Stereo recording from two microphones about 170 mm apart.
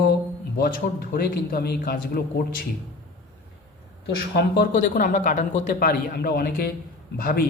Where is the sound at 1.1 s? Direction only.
65° left (ahead or behind).